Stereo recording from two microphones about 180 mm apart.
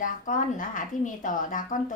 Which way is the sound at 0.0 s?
45° left (ahead or behind).